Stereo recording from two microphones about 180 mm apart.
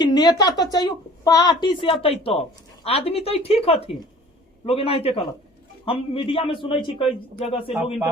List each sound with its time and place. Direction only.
0.0 s a woman's voice: 20° left (ahead or behind)